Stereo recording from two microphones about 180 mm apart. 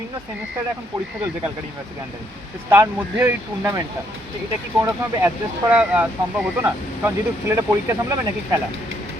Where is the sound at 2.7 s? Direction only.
10° right (ahead or behind).